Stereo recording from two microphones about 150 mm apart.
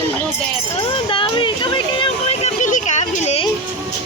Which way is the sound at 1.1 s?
35° left (ahead or behind).